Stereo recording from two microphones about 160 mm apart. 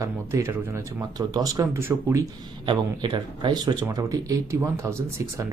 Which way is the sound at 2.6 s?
30° right (ahead or behind).